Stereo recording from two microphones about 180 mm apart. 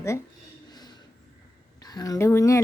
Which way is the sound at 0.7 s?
25° left (ahead or behind).